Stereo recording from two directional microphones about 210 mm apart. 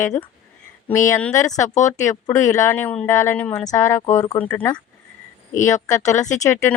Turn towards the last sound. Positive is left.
turn(degrees=15)  # may be behind; listen again after turning